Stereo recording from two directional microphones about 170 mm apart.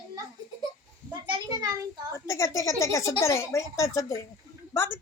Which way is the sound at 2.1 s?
15° left (ahead or behind).